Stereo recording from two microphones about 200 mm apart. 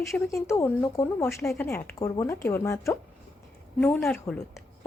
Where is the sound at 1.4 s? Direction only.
Centre (ahead or behind).